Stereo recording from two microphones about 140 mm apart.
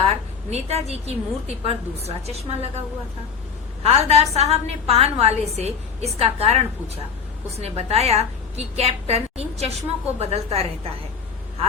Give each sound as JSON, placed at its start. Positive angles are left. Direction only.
{"t": 0.0, "sound": "a woman's voice", "side_deg": -50}
{"t": 3.8, "sound": "a woman's voice", "side_deg": -50}